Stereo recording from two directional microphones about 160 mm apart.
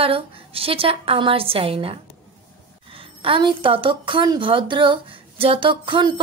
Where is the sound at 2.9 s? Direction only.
35° right (ahead or behind).